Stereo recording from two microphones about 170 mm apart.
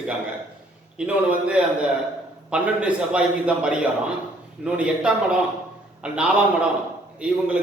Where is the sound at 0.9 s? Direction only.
5° right (ahead or behind).